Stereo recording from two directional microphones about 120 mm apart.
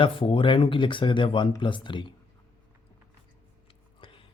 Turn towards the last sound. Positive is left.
turn(degrees=45)  # may be behind; listen again after turning